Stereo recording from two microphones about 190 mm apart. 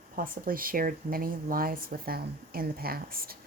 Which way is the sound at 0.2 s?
50° right (ahead or behind).